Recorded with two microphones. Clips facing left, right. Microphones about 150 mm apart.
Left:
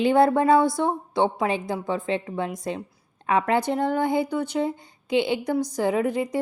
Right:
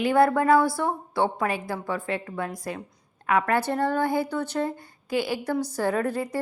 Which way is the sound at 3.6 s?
15° left (ahead or behind).